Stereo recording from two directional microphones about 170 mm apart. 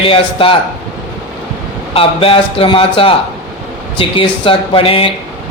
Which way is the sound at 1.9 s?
35° left (ahead or behind).